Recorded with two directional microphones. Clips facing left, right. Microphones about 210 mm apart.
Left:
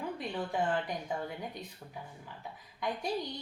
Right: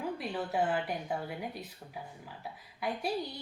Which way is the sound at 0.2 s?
5° right (ahead or behind).